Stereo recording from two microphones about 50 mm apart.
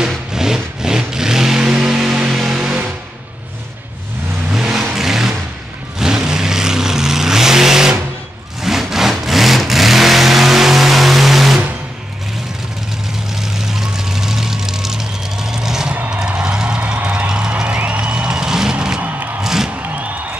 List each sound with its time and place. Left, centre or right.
0.3 s vehicle: centre
1.6 s music: centre
4.5 s vehicle: centre
13.3 s vehicle: centre
16.1 s music: centre
17.3 s music: centre
18.9 s music: right
19.4 s music: centre
20.0 s music: right